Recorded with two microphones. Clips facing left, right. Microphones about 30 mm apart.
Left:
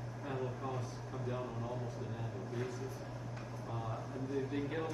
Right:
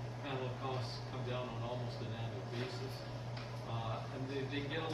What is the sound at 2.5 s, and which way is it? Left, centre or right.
Speech, right.